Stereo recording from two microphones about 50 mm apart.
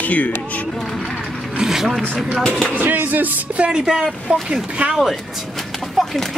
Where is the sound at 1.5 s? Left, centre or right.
Centre.